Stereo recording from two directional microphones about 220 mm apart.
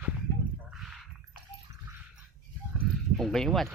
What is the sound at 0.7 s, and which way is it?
Rowboat, centre (ahead or behind).